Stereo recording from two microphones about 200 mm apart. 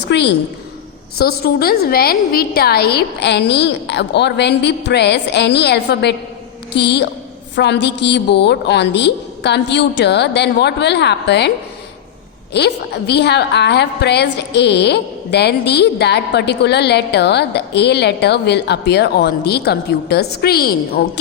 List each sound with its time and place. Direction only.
0.0 s a woman's voice: 60° left (ahead or behind)
12.5 s a woman's voice: 55° left (ahead or behind)